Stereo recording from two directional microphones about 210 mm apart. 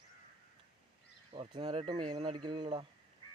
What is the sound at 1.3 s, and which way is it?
Speech, 25° right (ahead or behind).